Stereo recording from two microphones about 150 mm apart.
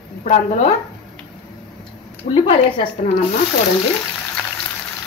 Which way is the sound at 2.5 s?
40° left (ahead or behind).